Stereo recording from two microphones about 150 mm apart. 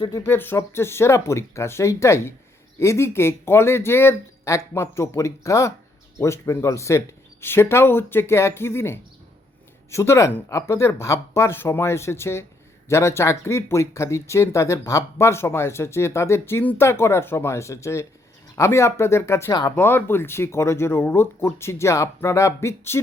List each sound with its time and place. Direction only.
0.0 s speech: 25° left (ahead or behind)
0.3 s speech: 15° left (ahead or behind)
19.7 s speech: 10° left (ahead or behind)